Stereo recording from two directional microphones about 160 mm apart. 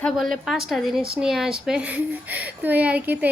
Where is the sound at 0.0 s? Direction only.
Centre (ahead or behind).